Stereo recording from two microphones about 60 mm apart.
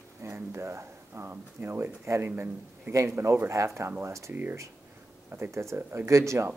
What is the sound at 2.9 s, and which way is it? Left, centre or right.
Speech, right.